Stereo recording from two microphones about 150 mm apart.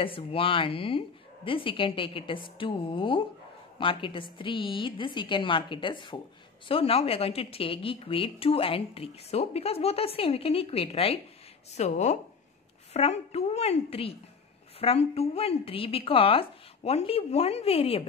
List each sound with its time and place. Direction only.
0.0 s a woman's voice: 35° left (ahead or behind)